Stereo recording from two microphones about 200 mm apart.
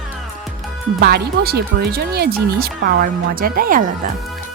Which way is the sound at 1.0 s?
50° right (ahead or behind).